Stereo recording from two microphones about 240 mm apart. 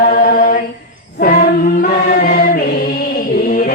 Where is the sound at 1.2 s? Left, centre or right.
Left.